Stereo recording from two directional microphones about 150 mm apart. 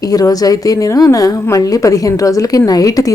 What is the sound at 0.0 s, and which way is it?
A woman's voice, 25° left (ahead or behind).